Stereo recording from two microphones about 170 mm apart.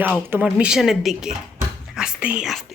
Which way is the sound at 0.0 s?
10° right (ahead or behind).